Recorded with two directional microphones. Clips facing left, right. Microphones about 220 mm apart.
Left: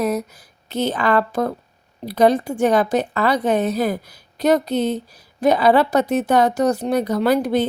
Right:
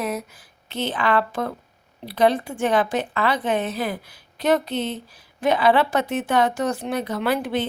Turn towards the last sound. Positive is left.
turn(degrees=40)  # may be behind; listen again after turning